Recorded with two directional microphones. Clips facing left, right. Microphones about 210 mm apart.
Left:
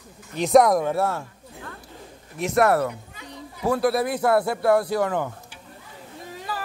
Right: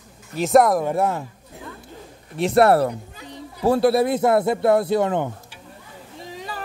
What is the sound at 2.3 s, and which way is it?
Speech, 30° right (ahead or behind).